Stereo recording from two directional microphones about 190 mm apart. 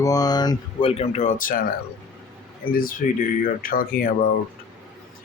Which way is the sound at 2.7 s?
45° left (ahead or behind).